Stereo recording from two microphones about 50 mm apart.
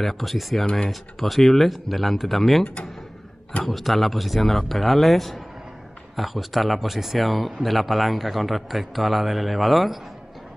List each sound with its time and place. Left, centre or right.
0.0 s a man's voice: centre
0.7 s speech: centre
1.2 s a man's voice: centre
2.6 s speech: left
3.6 s a man's voice: centre